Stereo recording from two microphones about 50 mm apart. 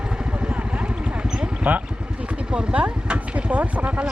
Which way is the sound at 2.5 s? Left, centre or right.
Right.